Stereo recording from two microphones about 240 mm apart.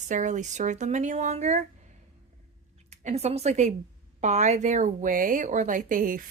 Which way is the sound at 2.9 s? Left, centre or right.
Right.